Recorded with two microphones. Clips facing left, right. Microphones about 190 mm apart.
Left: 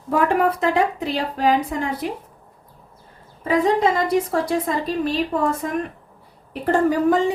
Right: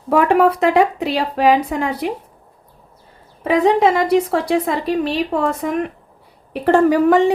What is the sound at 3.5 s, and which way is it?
Speech, 70° right (ahead or behind).